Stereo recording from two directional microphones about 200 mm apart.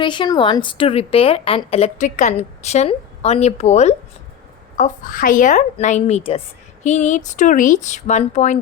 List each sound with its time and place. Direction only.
0.0 s a woman's voice: 25° left (ahead or behind)